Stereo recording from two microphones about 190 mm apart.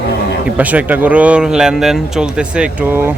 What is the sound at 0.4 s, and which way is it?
Speech, 10° right (ahead or behind).